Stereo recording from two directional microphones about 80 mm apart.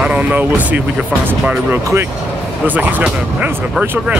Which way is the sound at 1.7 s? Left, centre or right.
Right.